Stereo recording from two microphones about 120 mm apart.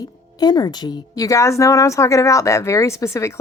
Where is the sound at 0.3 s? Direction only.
35° left (ahead or behind).